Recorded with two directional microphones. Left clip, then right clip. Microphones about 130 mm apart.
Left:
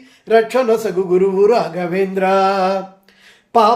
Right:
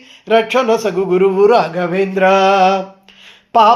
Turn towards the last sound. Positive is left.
turn(degrees=-10)  # may be behind; listen again after turning